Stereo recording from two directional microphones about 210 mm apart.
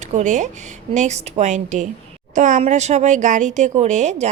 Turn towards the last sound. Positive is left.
turn(degrees=-35)  # may be behind; listen again after turning